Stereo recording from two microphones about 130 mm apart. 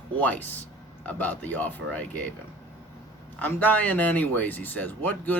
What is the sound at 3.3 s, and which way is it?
Speech, 15° left (ahead or behind).